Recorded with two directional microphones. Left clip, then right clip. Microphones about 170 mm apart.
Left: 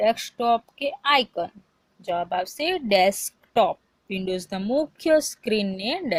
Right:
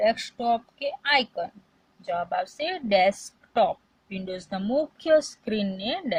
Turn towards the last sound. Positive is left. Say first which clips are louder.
# left 2 dB
turn(degrees=40)  # may be behind; listen again after turning